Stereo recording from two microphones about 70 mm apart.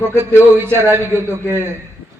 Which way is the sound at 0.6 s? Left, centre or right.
Right.